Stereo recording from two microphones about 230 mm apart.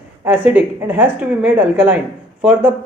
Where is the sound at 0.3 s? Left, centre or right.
Centre.